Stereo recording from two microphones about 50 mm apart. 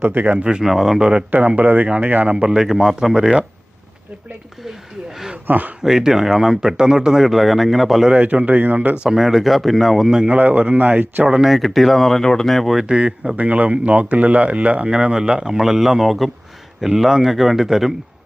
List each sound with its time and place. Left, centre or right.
0.0 s speech: right
0.3 s speech: centre
0.6 s speech: centre
0.9 s speech: centre
1.3 s speech: right
2.6 s speech: centre
5.5 s speech: right
5.8 s speech: centre
8.1 s speech: right
9.0 s speech: centre
10.2 s speech: right
11.4 s speech: centre
12.9 s speech: centre
13.3 s speech: right; by 17.9 s centre